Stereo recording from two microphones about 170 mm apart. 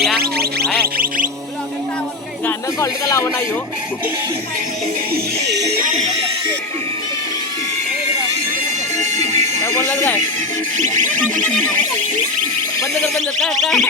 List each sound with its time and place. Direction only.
0.2 s music: 65° right (ahead or behind)
0.9 s music: 55° right (ahead or behind)
2.5 s speech: 15° left (ahead or behind)
5.1 s music: 85° right
9.0 s music: 40° right (ahead or behind)
9.6 s speech: 15° left (ahead or behind)
10.8 s music: 45° right (ahead or behind)
11.4 s speech: 10° left (ahead or behind)
13.0 s speech: centre (ahead or behind)